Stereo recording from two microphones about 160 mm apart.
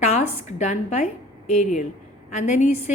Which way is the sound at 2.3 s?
45° left (ahead or behind).